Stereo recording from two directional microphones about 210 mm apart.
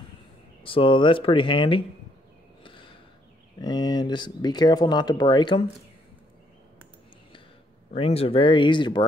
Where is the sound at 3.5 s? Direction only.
20° left (ahead or behind).